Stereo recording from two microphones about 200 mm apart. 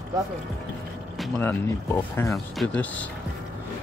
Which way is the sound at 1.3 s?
15° left (ahead or behind).